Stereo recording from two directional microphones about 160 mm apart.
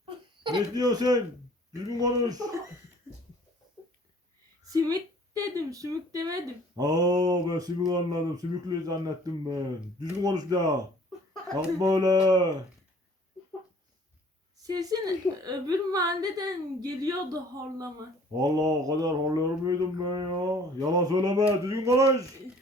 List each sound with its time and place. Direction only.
0.0 s a sound: 30° right (ahead or behind)
1.7 s speech: 20° right (ahead or behind)
4.6 s speech: 25° right (ahead or behind)
11.8 s speech: 25° right (ahead or behind)
14.6 s speech: 25° right (ahead or behind)